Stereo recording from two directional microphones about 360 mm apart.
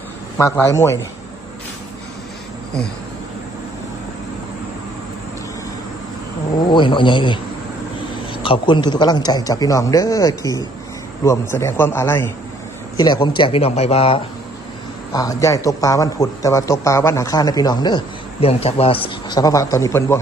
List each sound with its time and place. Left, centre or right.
0.3 s a man's voice: centre
6.7 s a man's voice: centre